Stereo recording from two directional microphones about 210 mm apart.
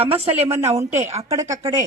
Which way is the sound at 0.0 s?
30° right (ahead or behind).